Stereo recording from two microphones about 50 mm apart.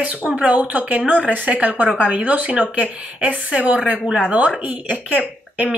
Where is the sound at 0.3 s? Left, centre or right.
Right.